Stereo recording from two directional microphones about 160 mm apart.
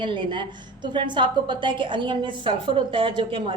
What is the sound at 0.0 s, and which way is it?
A woman's voice, 30° right (ahead or behind).